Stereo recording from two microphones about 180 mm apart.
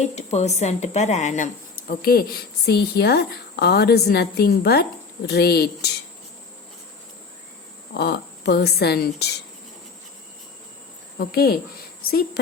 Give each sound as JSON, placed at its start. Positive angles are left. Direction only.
{"t": 0.0, "sound": "speech", "side_deg": 35}
{"t": 7.9, "sound": "speech", "side_deg": 65}
{"t": 11.2, "sound": "speech", "side_deg": 60}